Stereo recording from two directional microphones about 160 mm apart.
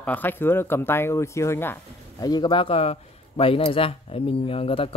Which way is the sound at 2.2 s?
25° left (ahead or behind).